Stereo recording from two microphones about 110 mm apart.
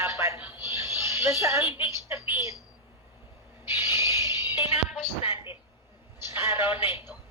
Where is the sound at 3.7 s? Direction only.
25° right (ahead or behind).